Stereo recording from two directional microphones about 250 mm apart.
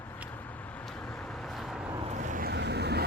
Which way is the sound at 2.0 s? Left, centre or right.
Right.